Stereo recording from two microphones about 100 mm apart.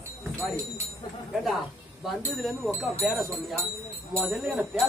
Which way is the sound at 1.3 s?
Centre (ahead or behind).